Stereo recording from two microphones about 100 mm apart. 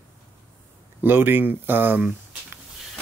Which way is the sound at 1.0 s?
20° right (ahead or behind).